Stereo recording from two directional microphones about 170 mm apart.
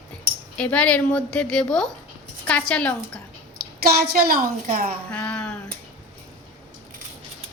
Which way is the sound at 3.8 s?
65° right (ahead or behind).